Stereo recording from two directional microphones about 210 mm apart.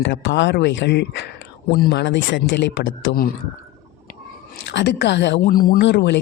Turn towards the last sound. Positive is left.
turn(degrees=55)  # may be behind; listen again after turning